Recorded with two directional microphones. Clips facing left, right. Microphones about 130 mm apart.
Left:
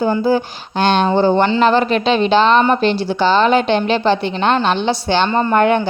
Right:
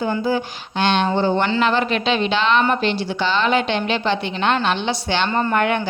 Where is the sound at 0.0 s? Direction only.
30° left (ahead or behind).